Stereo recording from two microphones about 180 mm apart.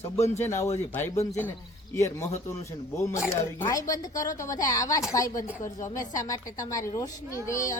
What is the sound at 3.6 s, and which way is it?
A woman's voice, 20° left (ahead or behind).